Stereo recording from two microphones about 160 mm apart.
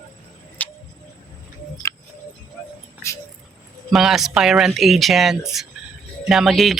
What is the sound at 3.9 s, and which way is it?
Music, centre (ahead or behind).